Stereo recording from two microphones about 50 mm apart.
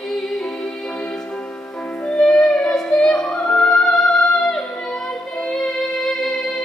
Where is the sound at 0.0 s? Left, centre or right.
Centre; by 2.2 s left.